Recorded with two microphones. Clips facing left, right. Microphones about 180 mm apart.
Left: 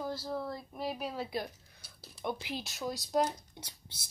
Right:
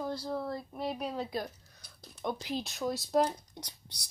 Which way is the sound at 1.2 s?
40° right (ahead or behind).